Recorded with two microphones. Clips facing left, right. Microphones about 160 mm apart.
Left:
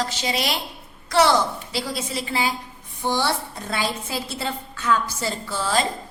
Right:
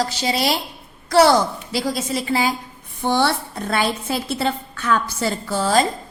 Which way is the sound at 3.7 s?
60° right (ahead or behind).